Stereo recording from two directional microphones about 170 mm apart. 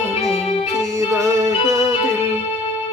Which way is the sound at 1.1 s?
15° right (ahead or behind).